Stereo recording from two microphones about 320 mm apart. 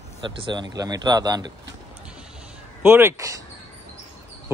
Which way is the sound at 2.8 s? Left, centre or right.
Centre.